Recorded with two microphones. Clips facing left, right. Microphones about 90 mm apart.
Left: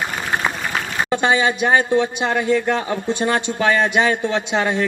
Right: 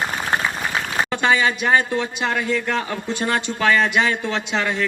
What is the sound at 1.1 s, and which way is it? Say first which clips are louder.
Speech: left 2 dB; 20° left (ahead or behind).